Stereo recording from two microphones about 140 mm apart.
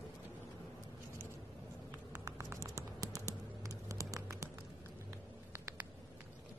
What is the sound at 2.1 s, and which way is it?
Typing, 20° right (ahead or behind).